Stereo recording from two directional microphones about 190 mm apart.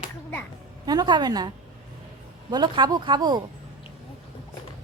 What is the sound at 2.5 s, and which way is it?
Speech, 20° right (ahead or behind).